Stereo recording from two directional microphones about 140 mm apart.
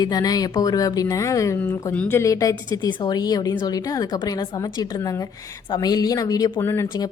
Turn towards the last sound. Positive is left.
turn(degrees=20)  # may be behind; listen again after turning